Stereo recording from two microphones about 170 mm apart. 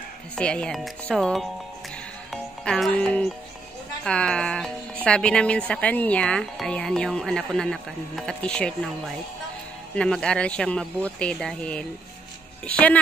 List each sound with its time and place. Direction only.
0.4 s speech: 5° left (ahead or behind)
9.9 s speech: 5° left (ahead or behind)